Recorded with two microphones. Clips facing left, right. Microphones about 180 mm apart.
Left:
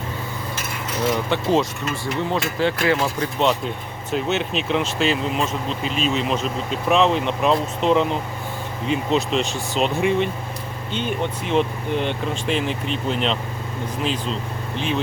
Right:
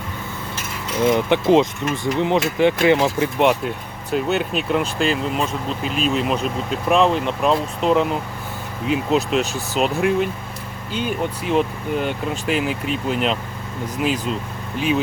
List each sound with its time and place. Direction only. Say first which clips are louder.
1.1 s speech: right 5 dB; 15° right (ahead or behind)
4.1 s speech: right 2 dB; centre (ahead or behind)